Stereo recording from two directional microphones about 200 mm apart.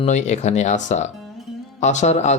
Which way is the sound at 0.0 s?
35° left (ahead or behind).